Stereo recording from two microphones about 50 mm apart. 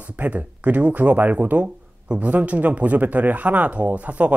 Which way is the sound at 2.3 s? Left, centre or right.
Right.